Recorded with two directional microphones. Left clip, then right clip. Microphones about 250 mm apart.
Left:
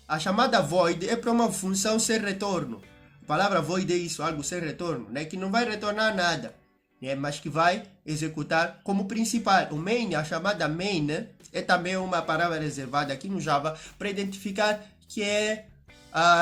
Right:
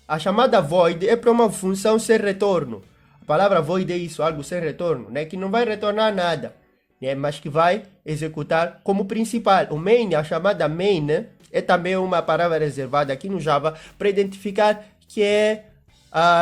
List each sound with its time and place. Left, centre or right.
0.1 s speech: right